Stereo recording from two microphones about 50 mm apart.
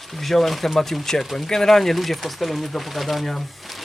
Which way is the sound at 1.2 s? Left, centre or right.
Centre.